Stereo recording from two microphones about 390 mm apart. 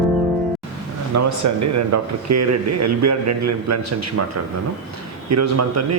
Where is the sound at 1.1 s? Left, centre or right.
Right.